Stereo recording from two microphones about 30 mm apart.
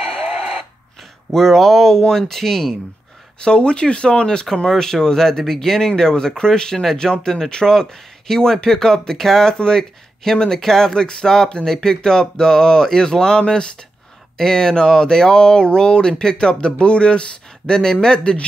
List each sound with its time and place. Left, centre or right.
0.1 s a sound: right
1.3 s speech: centre
3.4 s speech: left
4.6 s speech: centre
9.5 s speech: left
14.3 s speech: centre
18.3 s speech: left